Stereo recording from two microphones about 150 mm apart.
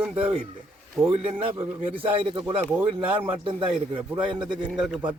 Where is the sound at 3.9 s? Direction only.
35° right (ahead or behind).